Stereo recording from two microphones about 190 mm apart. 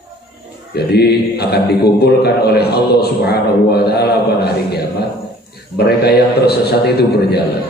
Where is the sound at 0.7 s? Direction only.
55° left (ahead or behind).